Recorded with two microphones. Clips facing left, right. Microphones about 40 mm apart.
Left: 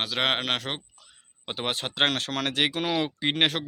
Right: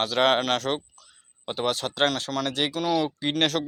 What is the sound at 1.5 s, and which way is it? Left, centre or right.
Speech, left.